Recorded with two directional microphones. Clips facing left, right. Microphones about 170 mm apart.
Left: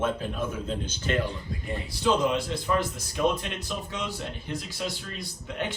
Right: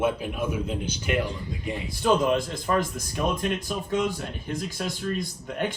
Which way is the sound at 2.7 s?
55° right (ahead or behind).